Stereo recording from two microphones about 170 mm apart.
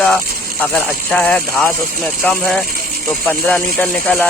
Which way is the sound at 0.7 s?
5° left (ahead or behind).